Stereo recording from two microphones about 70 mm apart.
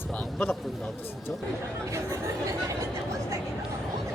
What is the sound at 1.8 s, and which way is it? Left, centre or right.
Speech, right.